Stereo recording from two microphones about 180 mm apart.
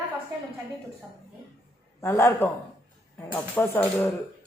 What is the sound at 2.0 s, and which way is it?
Speech, 15° left (ahead or behind).